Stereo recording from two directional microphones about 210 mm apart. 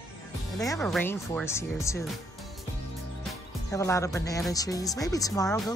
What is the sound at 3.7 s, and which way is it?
Speech, 15° left (ahead or behind).